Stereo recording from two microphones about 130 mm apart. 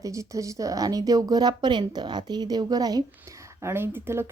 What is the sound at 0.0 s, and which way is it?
Speech, 25° right (ahead or behind).